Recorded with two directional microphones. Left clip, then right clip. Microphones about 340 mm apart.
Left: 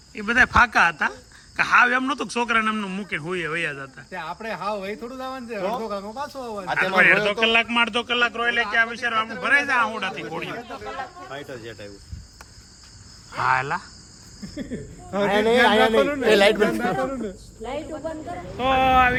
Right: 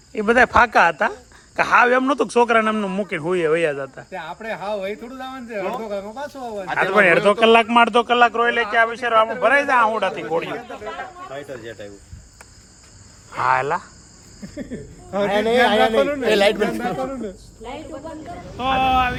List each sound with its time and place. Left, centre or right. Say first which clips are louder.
0.1 s a man's voice: right 3 dB; centre
4.1 s speech: left 1 dB; centre
6.7 s a man's voice: right 2 dB; centre
11.3 s speech: right 3 dB; centre
13.4 s a man's voice: right 3 dB; centre